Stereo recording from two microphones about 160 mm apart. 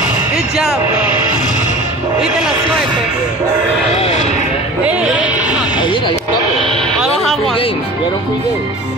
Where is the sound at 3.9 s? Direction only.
40° left (ahead or behind).